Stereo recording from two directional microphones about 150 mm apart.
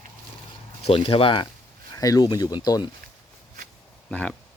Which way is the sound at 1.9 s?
25° left (ahead or behind).